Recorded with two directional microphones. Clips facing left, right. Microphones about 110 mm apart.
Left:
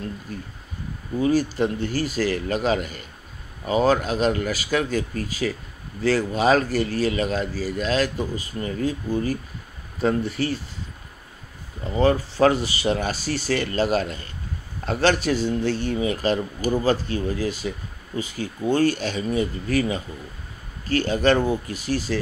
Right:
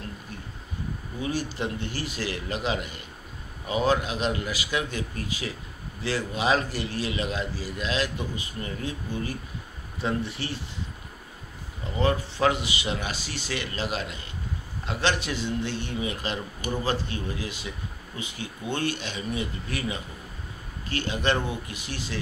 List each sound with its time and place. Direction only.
1.2 s a man's voice: 40° left (ahead or behind)
11.9 s speech: 35° left (ahead or behind)